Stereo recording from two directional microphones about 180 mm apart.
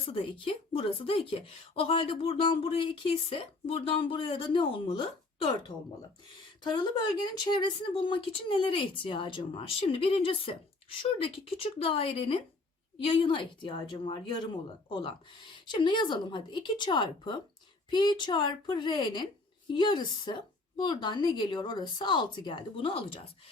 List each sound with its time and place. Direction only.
0.0 s a woman's voice: 30° left (ahead or behind)